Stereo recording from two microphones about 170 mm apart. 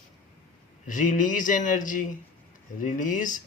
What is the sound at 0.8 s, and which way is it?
Speech, 50° left (ahead or behind).